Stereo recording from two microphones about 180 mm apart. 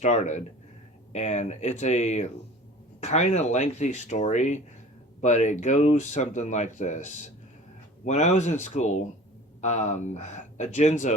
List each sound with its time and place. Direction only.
0.0 s speech: 40° left (ahead or behind)